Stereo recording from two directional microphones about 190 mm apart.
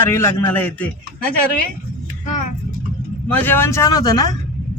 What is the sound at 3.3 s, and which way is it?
Speech, 10° left (ahead or behind).